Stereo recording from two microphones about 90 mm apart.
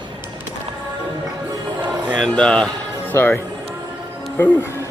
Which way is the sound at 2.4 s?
10° left (ahead or behind).